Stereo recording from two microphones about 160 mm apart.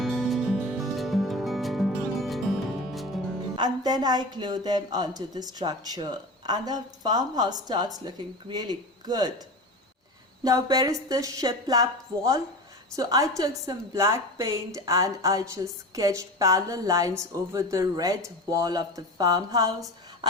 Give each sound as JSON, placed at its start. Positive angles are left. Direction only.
{"t": 0.0, "sound": "music", "side_deg": 0}
{"t": 3.5, "sound": "a woman's voice", "side_deg": -25}
{"t": 10.4, "sound": "a woman's voice", "side_deg": -25}